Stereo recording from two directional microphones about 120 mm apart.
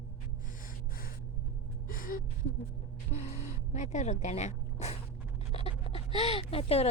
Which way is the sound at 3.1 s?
65° left (ahead or behind).